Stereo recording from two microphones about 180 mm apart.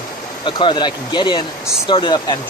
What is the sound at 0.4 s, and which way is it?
Speech, 25° left (ahead or behind).